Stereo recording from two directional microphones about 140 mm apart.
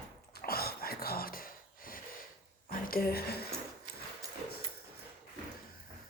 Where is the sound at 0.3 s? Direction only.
90° left.